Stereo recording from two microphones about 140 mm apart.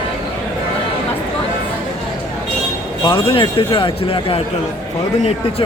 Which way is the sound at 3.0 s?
40° left (ahead or behind).